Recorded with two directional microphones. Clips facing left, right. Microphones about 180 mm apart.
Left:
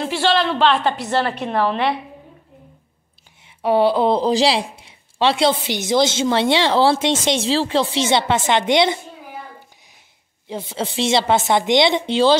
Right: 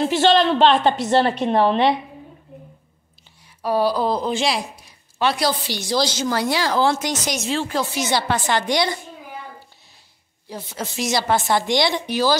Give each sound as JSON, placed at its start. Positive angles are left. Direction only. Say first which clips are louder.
{"t": 0.0, "sound": "a woman's voice", "louder": "right 3 dB", "side_deg": -20}
{"t": 0.3, "sound": "a woman's voice", "louder": "right 2 dB", "side_deg": -45}
{"t": 1.0, "sound": "a woman's voice", "louder": "right 3 dB", "side_deg": -25}
{"t": 3.6, "sound": "speech", "louder": "left 4 dB", "side_deg": 25}
{"t": 10.5, "sound": "speech", "louder": "left 5 dB", "side_deg": 25}